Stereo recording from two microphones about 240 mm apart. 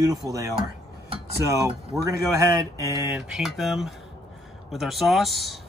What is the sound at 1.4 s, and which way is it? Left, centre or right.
Speech, centre.